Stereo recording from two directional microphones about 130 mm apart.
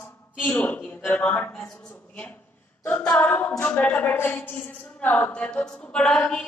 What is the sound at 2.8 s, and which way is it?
A capella, 10° left (ahead or behind).